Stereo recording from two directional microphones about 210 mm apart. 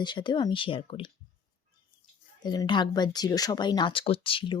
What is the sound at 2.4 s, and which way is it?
Speech, 20° left (ahead or behind).